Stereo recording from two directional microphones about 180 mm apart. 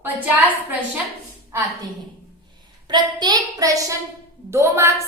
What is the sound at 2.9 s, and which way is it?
A woman's voice, 25° right (ahead or behind).